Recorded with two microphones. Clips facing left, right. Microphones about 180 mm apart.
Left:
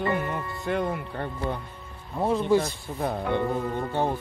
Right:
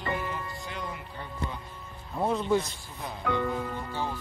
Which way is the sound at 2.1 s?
5° left (ahead or behind).